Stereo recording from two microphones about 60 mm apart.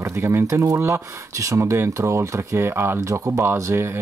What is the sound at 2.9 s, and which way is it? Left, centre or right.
Speech, right.